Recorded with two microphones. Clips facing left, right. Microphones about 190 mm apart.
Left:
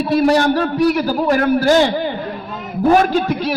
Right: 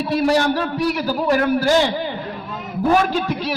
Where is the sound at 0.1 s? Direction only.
50° left (ahead or behind).